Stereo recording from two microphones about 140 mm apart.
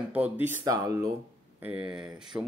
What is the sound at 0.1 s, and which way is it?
Speech, 10° right (ahead or behind).